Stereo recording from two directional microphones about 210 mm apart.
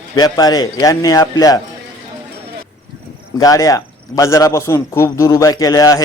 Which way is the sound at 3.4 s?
15° left (ahead or behind).